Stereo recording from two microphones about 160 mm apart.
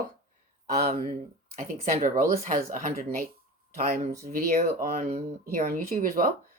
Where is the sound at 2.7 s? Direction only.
60° right (ahead or behind).